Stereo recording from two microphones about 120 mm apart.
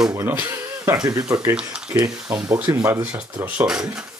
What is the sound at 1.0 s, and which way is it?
Speech, 30° right (ahead or behind).